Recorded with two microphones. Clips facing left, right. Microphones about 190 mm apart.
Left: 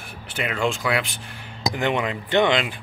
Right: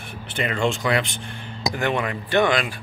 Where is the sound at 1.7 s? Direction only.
20° left (ahead or behind).